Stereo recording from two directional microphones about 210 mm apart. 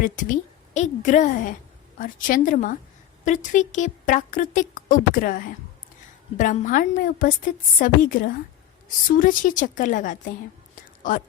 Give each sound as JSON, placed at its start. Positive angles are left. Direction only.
{"t": 0.0, "sound": "a woman's voice", "side_deg": 40}